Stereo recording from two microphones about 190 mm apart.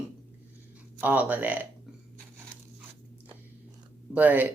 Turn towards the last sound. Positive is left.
turn(degrees=-10)  # may be behind; listen again after turning